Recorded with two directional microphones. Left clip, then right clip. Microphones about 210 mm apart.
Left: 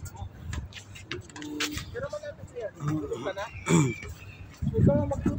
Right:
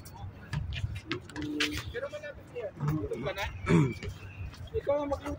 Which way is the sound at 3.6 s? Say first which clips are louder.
Left 2 dB; 45° left (ahead or behind).